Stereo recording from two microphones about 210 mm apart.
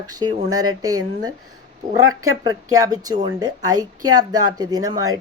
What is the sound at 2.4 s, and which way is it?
Speech, 15° right (ahead or behind).